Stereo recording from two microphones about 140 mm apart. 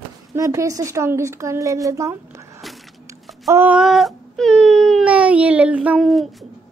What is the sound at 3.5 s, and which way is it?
Speech, 15° right (ahead or behind).